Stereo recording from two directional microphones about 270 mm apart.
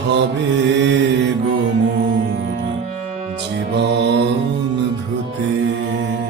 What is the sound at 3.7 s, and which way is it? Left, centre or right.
Mantra, right.